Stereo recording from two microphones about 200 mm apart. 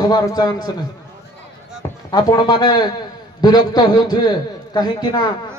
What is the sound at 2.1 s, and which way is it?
A man's voice, 20° left (ahead or behind).